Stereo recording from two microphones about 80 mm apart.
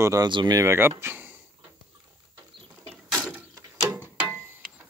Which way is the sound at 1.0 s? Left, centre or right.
Right.